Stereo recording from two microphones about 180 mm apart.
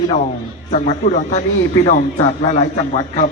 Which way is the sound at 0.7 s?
45° left (ahead or behind).